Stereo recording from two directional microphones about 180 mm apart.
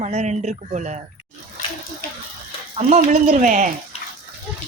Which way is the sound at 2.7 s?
35° right (ahead or behind).